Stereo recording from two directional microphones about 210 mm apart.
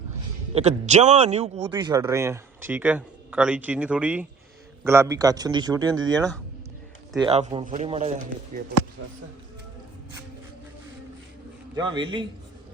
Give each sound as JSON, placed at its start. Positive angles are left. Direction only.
{"t": 0.5, "sound": "a man's voice", "side_deg": -30}
{"t": 1.8, "sound": "speech", "side_deg": -15}
{"t": 7.2, "sound": "speech", "side_deg": -25}
{"t": 7.6, "sound": "a man's voice", "side_deg": -40}
{"t": 11.8, "sound": "speech", "side_deg": -20}